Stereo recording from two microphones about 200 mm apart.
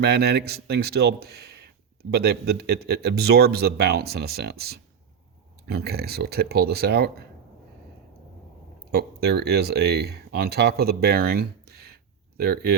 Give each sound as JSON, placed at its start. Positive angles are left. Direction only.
{"t": 0.0, "sound": "speech", "side_deg": -55}
{"t": 8.9, "sound": "speech", "side_deg": -55}